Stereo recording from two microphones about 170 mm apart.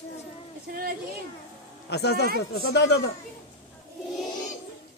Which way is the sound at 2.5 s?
90° left.